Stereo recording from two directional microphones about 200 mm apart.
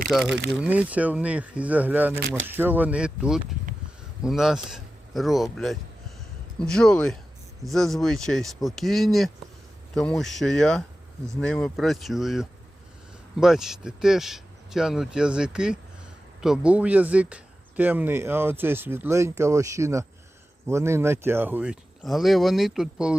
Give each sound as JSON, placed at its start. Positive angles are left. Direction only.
{"t": 0.3, "sound": "speech", "side_deg": -60}
{"t": 0.5, "sound": "speech", "side_deg": -5}